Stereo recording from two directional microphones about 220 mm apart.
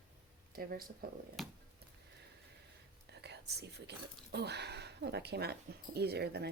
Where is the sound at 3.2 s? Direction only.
50° right (ahead or behind).